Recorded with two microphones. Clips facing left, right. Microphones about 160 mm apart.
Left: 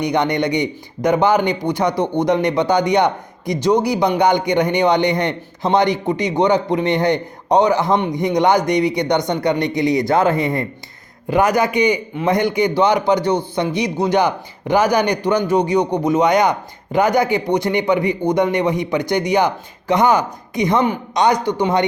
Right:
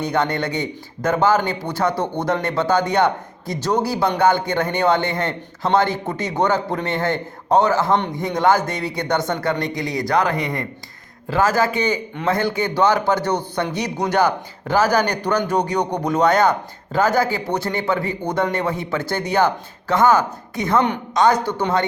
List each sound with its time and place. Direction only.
0.0 s speech: 15° left (ahead or behind)